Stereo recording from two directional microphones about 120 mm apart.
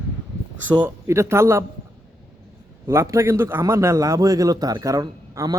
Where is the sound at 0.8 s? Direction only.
20° right (ahead or behind).